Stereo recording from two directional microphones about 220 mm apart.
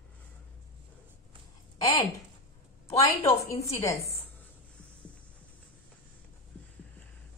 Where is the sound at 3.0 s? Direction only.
15° left (ahead or behind).